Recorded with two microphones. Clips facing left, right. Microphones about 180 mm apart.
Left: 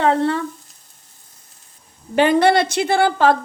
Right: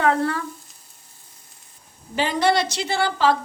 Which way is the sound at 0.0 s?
25° left (ahead or behind).